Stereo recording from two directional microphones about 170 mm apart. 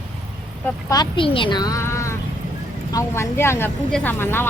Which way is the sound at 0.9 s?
25° left (ahead or behind).